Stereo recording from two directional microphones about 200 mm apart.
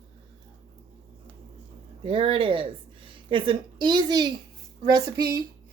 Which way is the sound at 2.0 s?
30° right (ahead or behind).